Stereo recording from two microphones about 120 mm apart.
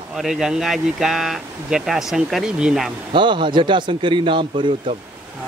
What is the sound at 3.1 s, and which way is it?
Speech, 40° right (ahead or behind).